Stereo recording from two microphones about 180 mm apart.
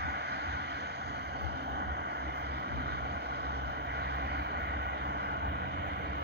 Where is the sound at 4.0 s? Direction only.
65° right (ahead or behind).